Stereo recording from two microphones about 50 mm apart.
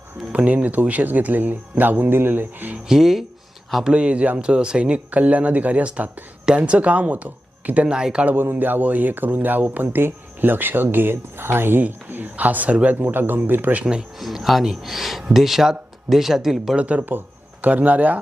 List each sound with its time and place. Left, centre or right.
0.3 s speech: right
2.8 s speech: centre
3.8 s speech: right
7.9 s speech: centre
8.4 s speech: right
9.8 s speech: right
13.0 s speech: right
14.2 s speech: centre
16.7 s speech: right
17.0 s speech: right